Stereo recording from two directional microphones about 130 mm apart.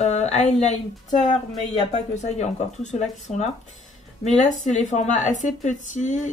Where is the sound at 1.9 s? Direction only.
60° left (ahead or behind).